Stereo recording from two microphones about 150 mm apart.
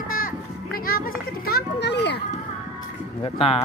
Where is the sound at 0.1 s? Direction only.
75° left (ahead or behind); by 2.2 s 90° left.